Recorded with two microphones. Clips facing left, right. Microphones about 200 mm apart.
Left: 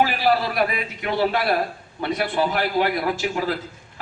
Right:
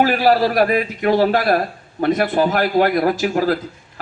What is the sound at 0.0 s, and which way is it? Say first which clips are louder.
A man's voice: right 5 dB; 45° right (ahead or behind).